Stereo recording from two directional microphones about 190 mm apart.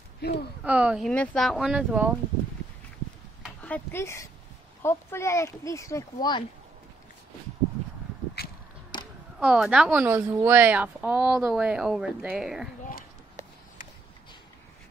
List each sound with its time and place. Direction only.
0.2 s speech: 60° left (ahead or behind)
0.7 s a woman's voice: 5° right (ahead or behind)
3.4 s speech: 5° left (ahead or behind)
8.4 s a sound: 55° left (ahead or behind)
8.9 s a sound: 25° left (ahead or behind)
9.4 s a woman's voice: 5° right (ahead or behind)